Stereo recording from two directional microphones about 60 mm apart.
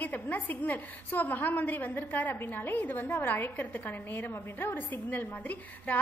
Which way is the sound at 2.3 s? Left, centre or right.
Left.